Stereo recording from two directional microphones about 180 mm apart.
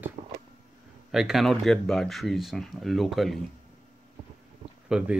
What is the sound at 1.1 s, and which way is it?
Speech, 5° right (ahead or behind).